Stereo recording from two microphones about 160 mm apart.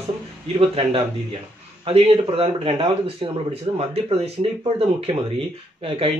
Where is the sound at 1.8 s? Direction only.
40° right (ahead or behind).